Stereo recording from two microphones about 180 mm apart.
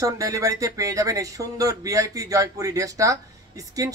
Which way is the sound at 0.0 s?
20° right (ahead or behind).